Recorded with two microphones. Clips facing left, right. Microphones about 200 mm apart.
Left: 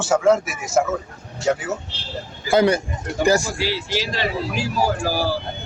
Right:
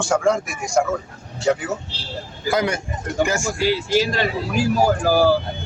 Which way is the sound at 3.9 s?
45° right (ahead or behind).